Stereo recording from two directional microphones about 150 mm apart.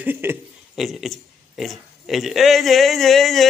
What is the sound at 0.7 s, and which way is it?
A man's voice, centre (ahead or behind).